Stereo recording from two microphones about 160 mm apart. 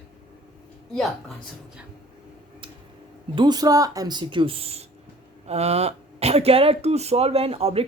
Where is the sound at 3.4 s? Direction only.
25° right (ahead or behind).